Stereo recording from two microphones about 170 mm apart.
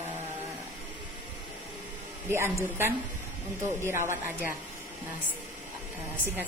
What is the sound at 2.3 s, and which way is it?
Speech, 15° right (ahead or behind).